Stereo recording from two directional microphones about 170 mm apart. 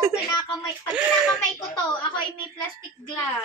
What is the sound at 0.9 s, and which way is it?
Speech, 5° right (ahead or behind).